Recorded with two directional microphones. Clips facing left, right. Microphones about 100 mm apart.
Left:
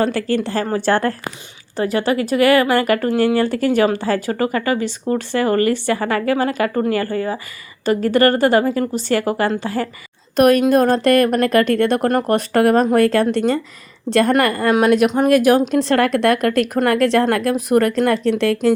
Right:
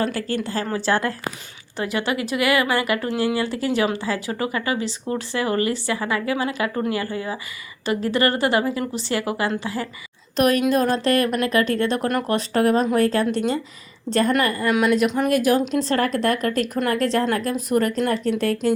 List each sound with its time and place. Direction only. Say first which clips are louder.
0.4 s a woman's voice: left 5 dB; 60° left (ahead or behind)
1.7 s a woman's voice: left 6 dB; 40° left (ahead or behind); by 12.0 s 60° left (ahead or behind)
12.0 s a woman's voice: left 5 dB; 45° left (ahead or behind)
14.1 s a woman's voice: left 5 dB; 70° left (ahead or behind); by 18.7 s 90° left